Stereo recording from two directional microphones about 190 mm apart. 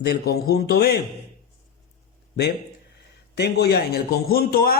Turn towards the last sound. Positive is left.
turn(degrees=55)  # may be behind; listen again after turning